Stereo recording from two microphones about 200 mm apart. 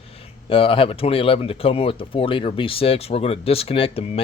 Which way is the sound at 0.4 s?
25° left (ahead or behind).